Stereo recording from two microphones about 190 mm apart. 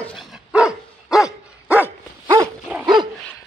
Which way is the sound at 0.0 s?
Centre (ahead or behind).